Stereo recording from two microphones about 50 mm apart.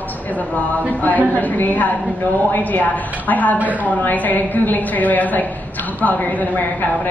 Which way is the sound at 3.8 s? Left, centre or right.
Left.